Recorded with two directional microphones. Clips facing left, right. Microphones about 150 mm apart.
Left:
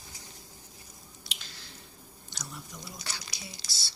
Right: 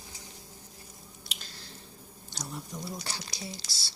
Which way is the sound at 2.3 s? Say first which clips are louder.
Right 5 dB; 35° right (ahead or behind).